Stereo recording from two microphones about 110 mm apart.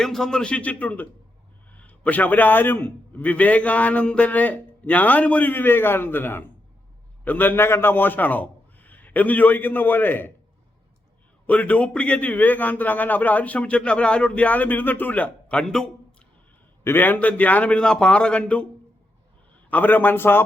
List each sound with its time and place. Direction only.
0.0 s a man's voice: 5° left (ahead or behind)
11.4 s a man's voice: 15° left (ahead or behind)
16.8 s a man's voice: 20° left (ahead or behind)
19.7 s a man's voice: 15° left (ahead or behind)